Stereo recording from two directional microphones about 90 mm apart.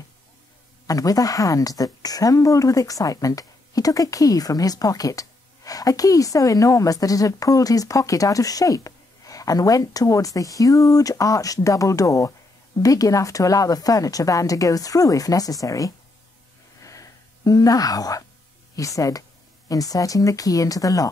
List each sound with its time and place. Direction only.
0.8 s a woman's voice: 40° left (ahead or behind)
16.8 s a sound: 40° left (ahead or behind)
18.8 s a woman's voice: 35° left (ahead or behind)